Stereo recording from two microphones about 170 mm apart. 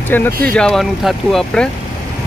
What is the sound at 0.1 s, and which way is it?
Speech, 10° left (ahead or behind).